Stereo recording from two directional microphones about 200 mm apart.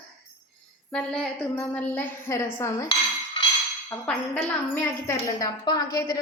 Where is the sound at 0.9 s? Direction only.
5° left (ahead or behind).